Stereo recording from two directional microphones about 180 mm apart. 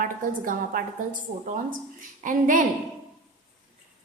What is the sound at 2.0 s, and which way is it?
Speech, 45° right (ahead or behind).